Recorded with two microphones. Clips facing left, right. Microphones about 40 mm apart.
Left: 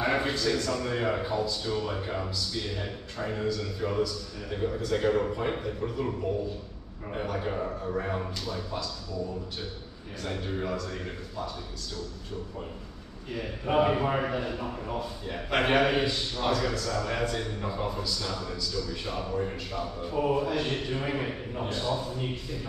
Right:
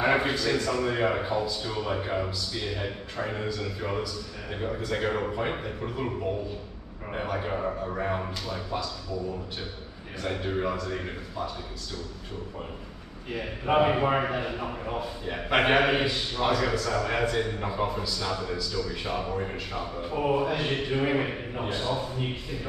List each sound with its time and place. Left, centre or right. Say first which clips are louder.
0.0 s a man's voice: right 3 dB; centre
10.2 s a man's voice: right 4 dB; centre
13.3 s a man's voice: right 3 dB; right